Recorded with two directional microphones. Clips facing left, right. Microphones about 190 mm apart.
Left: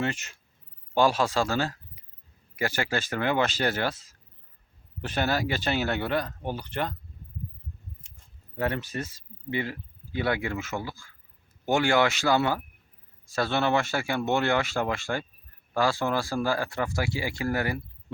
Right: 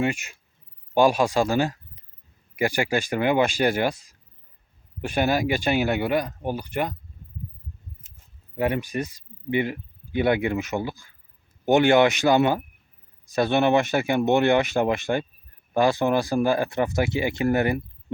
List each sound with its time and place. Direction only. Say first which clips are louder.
0.0 s speech: right 5 dB; 10° right (ahead or behind)
8.5 s speech: right 5 dB; 15° right (ahead or behind)